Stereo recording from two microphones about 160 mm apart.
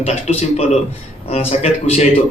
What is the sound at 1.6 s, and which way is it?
Speech, 40° left (ahead or behind).